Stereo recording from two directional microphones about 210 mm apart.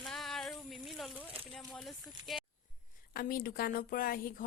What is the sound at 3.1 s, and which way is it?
A woman's voice, 45° left (ahead or behind).